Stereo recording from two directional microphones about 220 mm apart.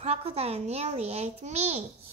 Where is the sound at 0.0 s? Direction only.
30° right (ahead or behind).